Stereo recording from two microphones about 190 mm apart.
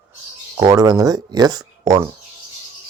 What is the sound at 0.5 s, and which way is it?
Speech, 15° right (ahead or behind).